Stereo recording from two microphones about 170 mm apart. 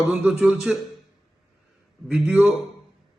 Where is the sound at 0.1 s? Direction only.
5° right (ahead or behind).